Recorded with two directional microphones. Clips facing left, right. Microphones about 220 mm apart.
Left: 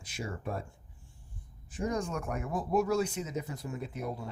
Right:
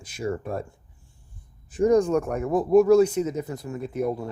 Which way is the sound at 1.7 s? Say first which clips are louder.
Right 14 dB; 40° right (ahead or behind).